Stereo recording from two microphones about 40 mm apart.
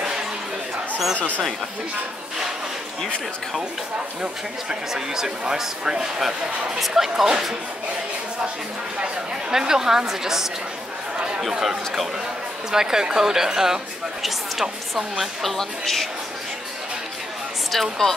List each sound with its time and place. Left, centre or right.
1.1 s speech: left
4.2 s speech: centre
9.5 s speech: centre
11.1 s chatter: right
11.6 s speech: centre
15.5 s speech: centre
17.6 s speech: centre